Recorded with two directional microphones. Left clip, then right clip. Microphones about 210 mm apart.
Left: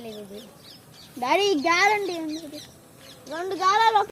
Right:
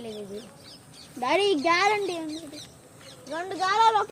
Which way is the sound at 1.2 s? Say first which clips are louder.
Left 1 dB; 20° left (ahead or behind).